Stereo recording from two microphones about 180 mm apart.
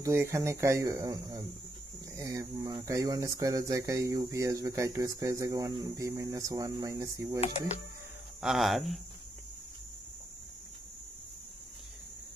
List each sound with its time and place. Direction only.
0.0 s speech: 15° right (ahead or behind)
7.3 s speech: 35° left (ahead or behind)
8.4 s speech: centre (ahead or behind)